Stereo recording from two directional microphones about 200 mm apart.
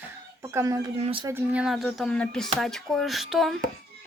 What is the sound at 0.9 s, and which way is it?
Speech, 30° right (ahead or behind).